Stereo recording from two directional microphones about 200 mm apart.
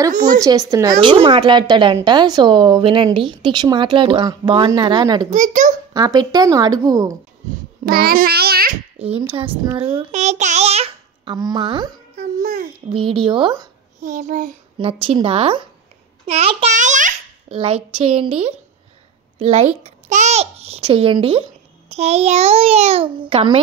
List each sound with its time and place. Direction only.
0.4 s speech: 20° right (ahead or behind)
5.3 s a child's voice: 40° right (ahead or behind)
5.9 s a woman's voice: 20° right (ahead or behind)
7.8 s a child's voice: 50° right (ahead or behind)
8.9 s a sound: 30° right (ahead or behind)
9.8 s speech: 25° right (ahead or behind)
12.2 s a child's voice: 45° right (ahead or behind)
12.9 s speech: 25° right (ahead or behind)
14.0 s a child's voice: 40° right (ahead or behind)
14.8 s a child's voice: 25° right (ahead or behind)